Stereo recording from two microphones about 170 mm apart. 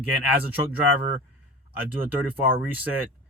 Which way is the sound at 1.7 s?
10° right (ahead or behind).